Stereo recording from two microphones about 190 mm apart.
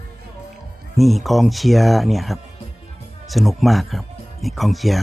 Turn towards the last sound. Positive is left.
turn(degrees=0)  # may be behind; listen again after turning